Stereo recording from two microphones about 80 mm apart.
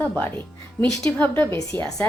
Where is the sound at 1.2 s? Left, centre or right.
Left.